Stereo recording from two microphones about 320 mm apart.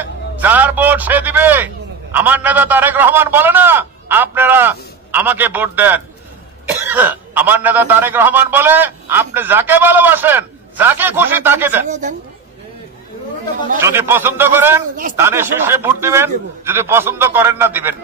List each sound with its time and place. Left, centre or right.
0.0 s a man's voice: centre
11.9 s a woman's voice: right
13.7 s speech: centre